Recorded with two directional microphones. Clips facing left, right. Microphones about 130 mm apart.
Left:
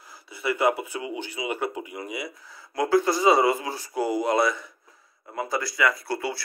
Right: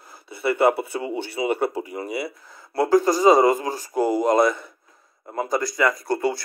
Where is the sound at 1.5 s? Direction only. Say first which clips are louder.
Right 5 dB; 35° right (ahead or behind).